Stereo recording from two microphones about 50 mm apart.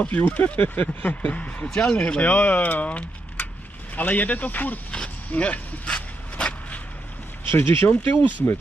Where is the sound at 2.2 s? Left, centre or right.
Left.